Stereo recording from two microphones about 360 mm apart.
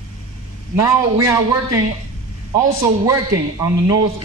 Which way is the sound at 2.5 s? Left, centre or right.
Centre.